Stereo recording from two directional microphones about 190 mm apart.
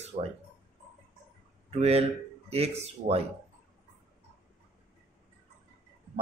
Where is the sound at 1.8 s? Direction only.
35° right (ahead or behind).